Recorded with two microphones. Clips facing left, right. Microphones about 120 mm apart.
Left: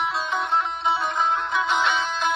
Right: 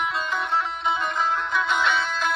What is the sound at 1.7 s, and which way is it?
Music, centre (ahead or behind).